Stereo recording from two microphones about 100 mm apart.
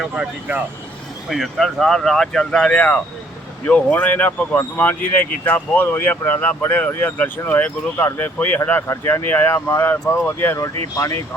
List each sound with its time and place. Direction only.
0.0 s speech: 10° right (ahead or behind)
1.3 s speech: centre (ahead or behind); by 11.2 s 30° left (ahead or behind)